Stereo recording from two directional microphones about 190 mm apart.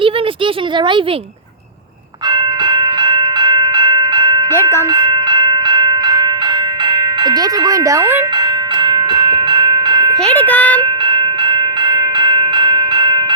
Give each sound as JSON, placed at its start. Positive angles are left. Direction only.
{"t": 2.3, "sound": "train", "side_deg": -20}
{"t": 4.9, "sound": "a sound", "side_deg": -20}
{"t": 6.8, "sound": "speech", "side_deg": -20}
{"t": 8.4, "sound": "train", "side_deg": -25}
{"t": 10.2, "sound": "speech", "side_deg": 10}
{"t": 11.0, "sound": "bell", "side_deg": -25}